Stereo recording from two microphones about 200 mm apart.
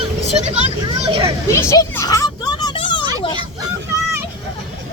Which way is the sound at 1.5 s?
15° left (ahead or behind).